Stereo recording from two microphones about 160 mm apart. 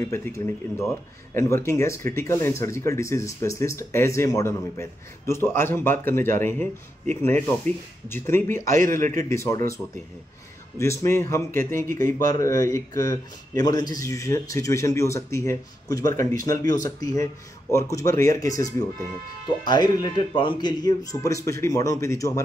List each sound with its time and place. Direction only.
0.0 s speech: 15° left (ahead or behind)
8.6 s a man's voice: 55° right (ahead or behind)
9.3 s speech: 20° left (ahead or behind)
10.8 s speech: 15° left (ahead or behind)